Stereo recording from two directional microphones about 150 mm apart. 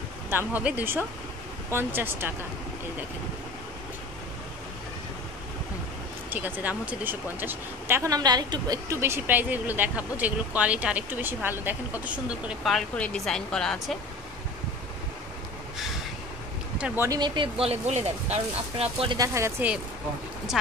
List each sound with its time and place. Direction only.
0.3 s speech: 15° right (ahead or behind)
6.3 s speech: 10° right (ahead or behind)
9.0 s speech: 15° right (ahead or behind)
12.6 s speech: 5° left (ahead or behind)
16.7 s speech: 10° right (ahead or behind)
17.2 s speech: 35° right (ahead or behind)
19.1 s speech: 20° right (ahead or behind)